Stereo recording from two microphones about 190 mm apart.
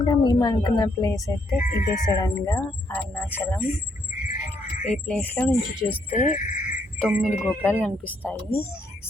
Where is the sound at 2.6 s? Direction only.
5° left (ahead or behind).